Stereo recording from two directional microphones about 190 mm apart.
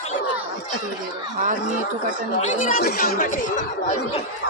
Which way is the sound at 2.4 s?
40° left (ahead or behind).